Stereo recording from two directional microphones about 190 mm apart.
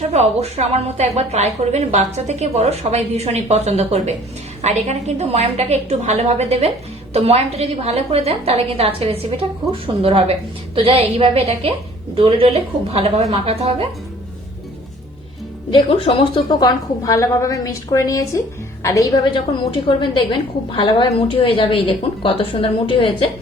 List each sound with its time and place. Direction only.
0.1 s a woman's voice: 35° right (ahead or behind)
15.7 s a woman's voice: 30° left (ahead or behind)